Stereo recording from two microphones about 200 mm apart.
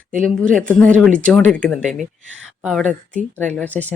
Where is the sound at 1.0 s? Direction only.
5° left (ahead or behind).